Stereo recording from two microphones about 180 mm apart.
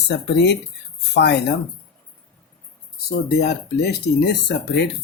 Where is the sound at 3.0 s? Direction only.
65° left (ahead or behind).